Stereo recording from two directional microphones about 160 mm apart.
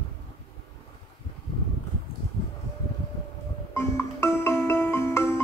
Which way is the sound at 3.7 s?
15° left (ahead or behind).